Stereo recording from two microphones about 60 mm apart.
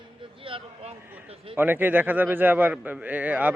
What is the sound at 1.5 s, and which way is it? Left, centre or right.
A man's voice, right.